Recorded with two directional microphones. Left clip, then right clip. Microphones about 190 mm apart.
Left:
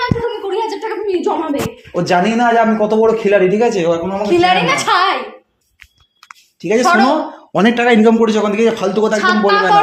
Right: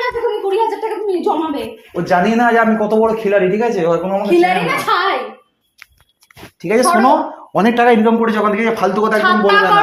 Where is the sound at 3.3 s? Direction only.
40° left (ahead or behind).